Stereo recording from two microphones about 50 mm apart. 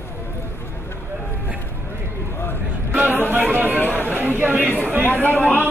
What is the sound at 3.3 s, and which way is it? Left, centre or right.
Speech, right.